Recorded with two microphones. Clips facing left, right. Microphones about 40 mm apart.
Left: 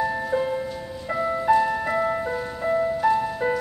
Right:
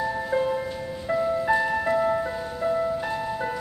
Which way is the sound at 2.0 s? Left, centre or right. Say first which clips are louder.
Even; centre.